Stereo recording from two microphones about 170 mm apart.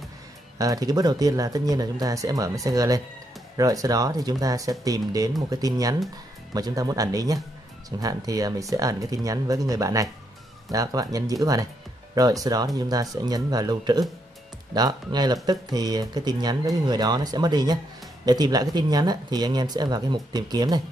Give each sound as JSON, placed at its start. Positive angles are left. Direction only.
{"t": 0.6, "sound": "speech", "side_deg": -20}